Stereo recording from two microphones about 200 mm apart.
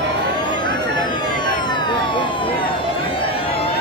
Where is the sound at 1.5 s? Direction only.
20° left (ahead or behind).